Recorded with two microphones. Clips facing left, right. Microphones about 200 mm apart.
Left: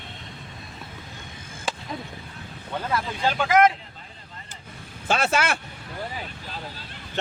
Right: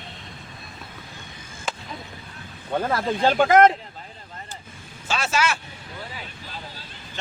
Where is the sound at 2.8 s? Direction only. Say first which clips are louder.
Right 4 dB; 50° right (ahead or behind).